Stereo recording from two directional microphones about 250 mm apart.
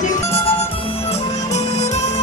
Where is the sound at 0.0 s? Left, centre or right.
Left.